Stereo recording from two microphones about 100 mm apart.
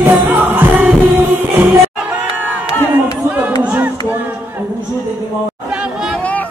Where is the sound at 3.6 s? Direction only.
15° right (ahead or behind).